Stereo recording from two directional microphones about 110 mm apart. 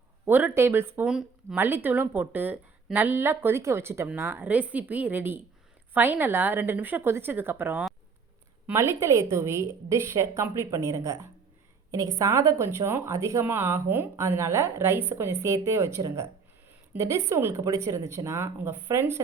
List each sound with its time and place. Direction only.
0.3 s a woman's voice: 15° right (ahead or behind)
1.0 s speech: 5° right (ahead or behind)
1.5 s a woman's voice: 20° right (ahead or behind)